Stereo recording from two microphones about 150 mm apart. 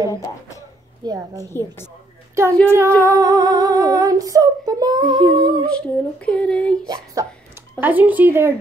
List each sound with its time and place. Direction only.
0.1 s speech: 20° left (ahead or behind)
1.0 s humming: 25° right (ahead or behind)
1.4 s speech: 15° left (ahead or behind)
2.7 s humming: 20° right (ahead or behind)
5.7 s speech: 5° left (ahead or behind)
7.2 s humming: 20° right (ahead or behind)
7.8 s speech: 10° right (ahead or behind)